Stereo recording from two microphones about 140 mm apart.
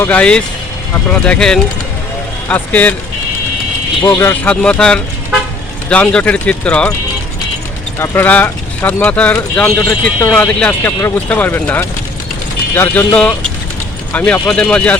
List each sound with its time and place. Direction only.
0.0 s speech: 10° left (ahead or behind)
4.2 s speech: 10° left (ahead or behind)
7.9 s speech: 15° left (ahead or behind)
10.3 s speech: 10° left (ahead or behind)